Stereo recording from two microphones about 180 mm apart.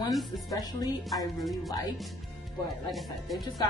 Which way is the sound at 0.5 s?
20° left (ahead or behind).